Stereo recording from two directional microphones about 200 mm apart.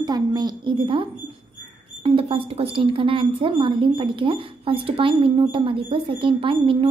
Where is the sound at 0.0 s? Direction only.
20° right (ahead or behind).